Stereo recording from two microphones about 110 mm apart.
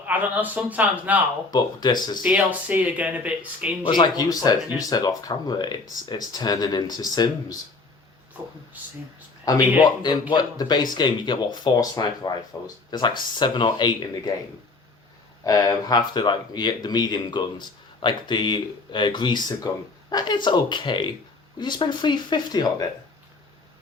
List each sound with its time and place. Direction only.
0.0 s speech: 15° right (ahead or behind)
1.5 s speech: 40° left (ahead or behind)
2.2 s speech: 10° right (ahead or behind)
3.8 s speech: 45° left (ahead or behind)
9.5 s speech: 30° left (ahead or behind)
15.4 s speech: 35° left (ahead or behind)